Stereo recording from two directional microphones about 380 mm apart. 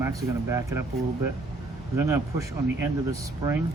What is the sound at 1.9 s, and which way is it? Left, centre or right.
Speech, centre.